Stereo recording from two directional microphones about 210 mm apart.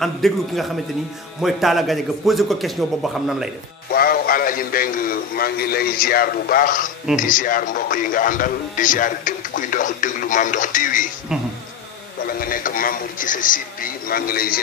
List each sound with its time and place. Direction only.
0.0 s a man's voice: centre (ahead or behind)
3.9 s a man's voice: 45° left (ahead or behind)
12.3 s a man's voice: 45° left (ahead or behind)